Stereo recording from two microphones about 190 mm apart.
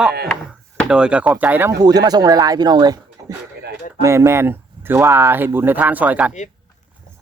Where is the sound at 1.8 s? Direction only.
20° right (ahead or behind).